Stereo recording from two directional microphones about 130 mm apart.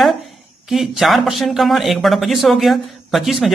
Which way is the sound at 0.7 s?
Centre (ahead or behind).